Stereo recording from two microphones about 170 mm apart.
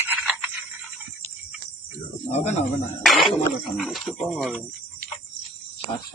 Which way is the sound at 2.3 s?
40° left (ahead or behind).